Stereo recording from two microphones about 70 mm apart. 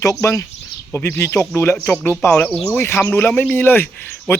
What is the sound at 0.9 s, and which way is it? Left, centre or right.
Speech, left.